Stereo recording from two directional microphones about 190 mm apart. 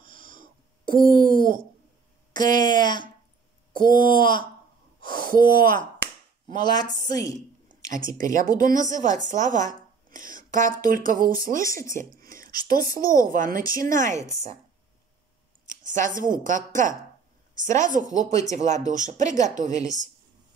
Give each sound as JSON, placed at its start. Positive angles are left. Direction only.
{"t": 0.0, "sound": "wheeze", "side_deg": 25}
{"t": 0.4, "sound": "a sound", "side_deg": -50}
{"t": 2.6, "sound": "a woman's voice", "side_deg": 20}
{"t": 3.7, "sound": "speech", "side_deg": -50}
{"t": 4.2, "sound": "a woman's voice", "side_deg": 25}
{"t": 5.0, "sound": "speech", "side_deg": -50}
{"t": 6.5, "sound": "a woman's voice", "side_deg": 20}
{"t": 7.9, "sound": "speech", "side_deg": -45}
{"t": 15.6, "sound": "speech", "side_deg": -40}